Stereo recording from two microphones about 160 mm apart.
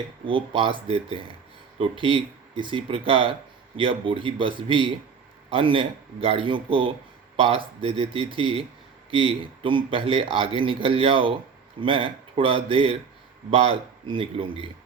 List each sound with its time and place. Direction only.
0.3 s speech: 35° right (ahead or behind)